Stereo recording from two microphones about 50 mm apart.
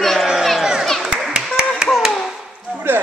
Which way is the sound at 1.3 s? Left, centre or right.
Centre.